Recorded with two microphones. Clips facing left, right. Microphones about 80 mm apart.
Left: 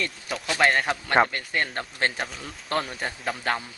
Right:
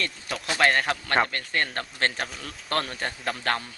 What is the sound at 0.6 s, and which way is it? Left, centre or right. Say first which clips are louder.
Speech: even; centre.